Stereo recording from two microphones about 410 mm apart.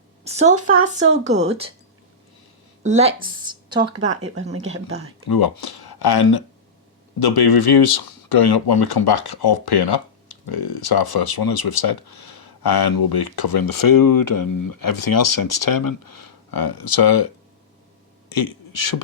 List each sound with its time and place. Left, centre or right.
0.3 s a woman's voice: centre
2.8 s speech: centre
5.3 s speech: left